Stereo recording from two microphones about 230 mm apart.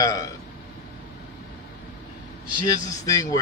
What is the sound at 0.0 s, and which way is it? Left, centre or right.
Speech, centre.